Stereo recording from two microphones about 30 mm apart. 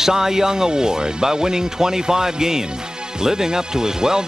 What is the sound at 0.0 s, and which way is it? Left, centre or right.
Speech, centre.